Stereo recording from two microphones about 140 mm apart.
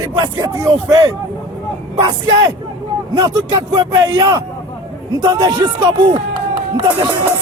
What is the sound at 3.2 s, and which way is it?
A man's voice, 25° right (ahead or behind).